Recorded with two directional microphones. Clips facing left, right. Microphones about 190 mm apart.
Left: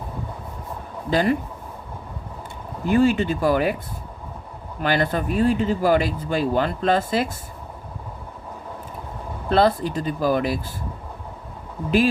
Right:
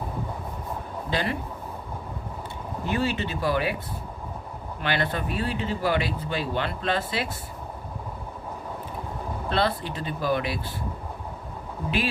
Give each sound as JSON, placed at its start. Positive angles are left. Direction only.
{"t": 1.1, "sound": "speech", "side_deg": 45}
{"t": 2.9, "sound": "speech", "side_deg": 50}
{"t": 4.8, "sound": "speech", "side_deg": 40}
{"t": 9.5, "sound": "speech", "side_deg": 45}